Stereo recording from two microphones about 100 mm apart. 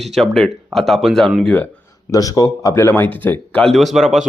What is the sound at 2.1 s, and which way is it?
Speech, 35° left (ahead or behind).